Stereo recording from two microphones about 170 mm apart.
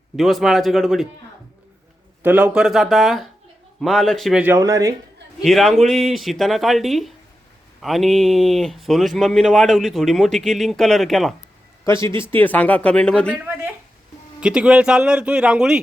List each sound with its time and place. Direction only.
0.2 s speech: centre (ahead or behind)
2.2 s speech: 10° right (ahead or behind)
4.5 s speech: 20° right (ahead or behind)
5.4 s speech: centre (ahead or behind)
14.4 s speech: 5° right (ahead or behind)